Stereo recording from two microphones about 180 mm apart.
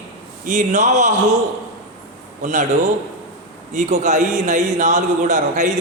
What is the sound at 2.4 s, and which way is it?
A man's voice, 40° right (ahead or behind).